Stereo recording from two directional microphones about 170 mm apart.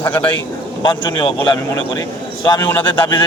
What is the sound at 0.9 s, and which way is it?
Speech, 30° left (ahead or behind).